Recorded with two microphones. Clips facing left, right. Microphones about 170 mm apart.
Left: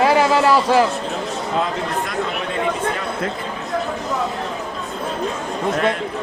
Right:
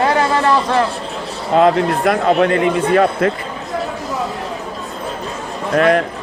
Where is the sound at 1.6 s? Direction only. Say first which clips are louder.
Right 11 dB; 70° right (ahead or behind).